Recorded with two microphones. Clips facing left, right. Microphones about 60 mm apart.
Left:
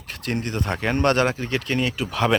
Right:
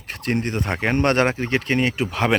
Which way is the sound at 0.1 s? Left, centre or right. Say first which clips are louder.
Right 3 dB; right.